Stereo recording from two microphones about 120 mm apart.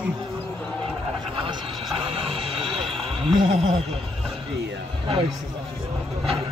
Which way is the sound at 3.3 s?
50° right (ahead or behind).